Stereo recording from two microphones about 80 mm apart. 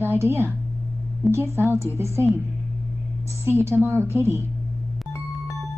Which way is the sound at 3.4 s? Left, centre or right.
Right.